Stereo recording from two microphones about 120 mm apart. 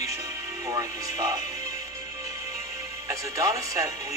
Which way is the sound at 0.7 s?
25° right (ahead or behind).